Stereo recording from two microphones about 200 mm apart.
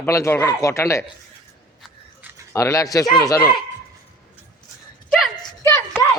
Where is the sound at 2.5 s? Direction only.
15° left (ahead or behind).